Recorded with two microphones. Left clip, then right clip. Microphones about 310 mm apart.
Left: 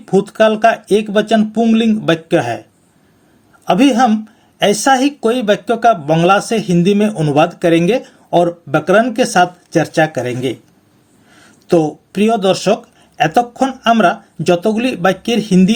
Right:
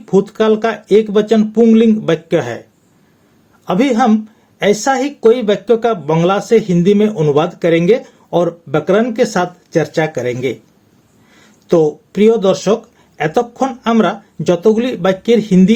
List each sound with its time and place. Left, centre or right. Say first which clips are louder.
0.0 s speech: left 1 dB; left
3.7 s speech: left 2 dB; left
11.7 s speech: right 2 dB; left